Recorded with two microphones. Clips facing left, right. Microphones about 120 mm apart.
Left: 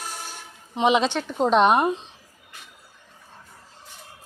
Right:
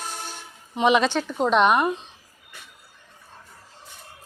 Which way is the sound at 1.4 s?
35° left (ahead or behind).